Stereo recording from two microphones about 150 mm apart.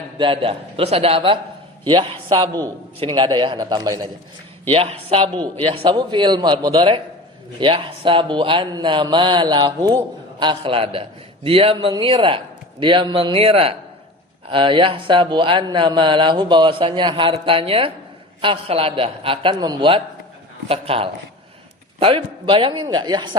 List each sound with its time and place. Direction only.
0.2 s a man's voice: 35° right (ahead or behind)
4.7 s speech: 40° right (ahead or behind)